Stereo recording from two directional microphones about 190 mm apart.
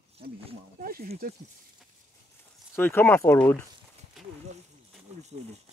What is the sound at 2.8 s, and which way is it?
Speech, 10° left (ahead or behind).